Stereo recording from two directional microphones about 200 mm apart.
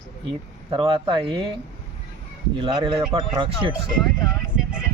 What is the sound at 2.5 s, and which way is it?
Speech, 25° right (ahead or behind).